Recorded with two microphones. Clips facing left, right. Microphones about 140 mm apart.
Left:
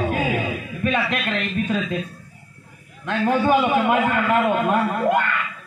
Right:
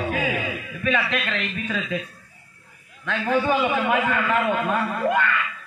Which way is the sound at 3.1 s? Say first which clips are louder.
Left 3 dB; 40° left (ahead or behind).